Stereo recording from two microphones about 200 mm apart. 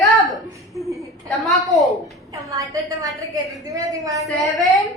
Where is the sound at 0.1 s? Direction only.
Centre (ahead or behind).